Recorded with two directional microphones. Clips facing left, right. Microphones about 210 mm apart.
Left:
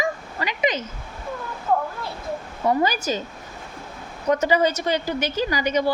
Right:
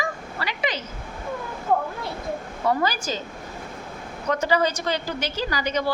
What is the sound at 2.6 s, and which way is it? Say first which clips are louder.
Speech: left 2 dB; 15° left (ahead or behind).